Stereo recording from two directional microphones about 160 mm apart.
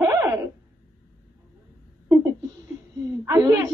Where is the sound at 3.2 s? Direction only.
20° right (ahead or behind).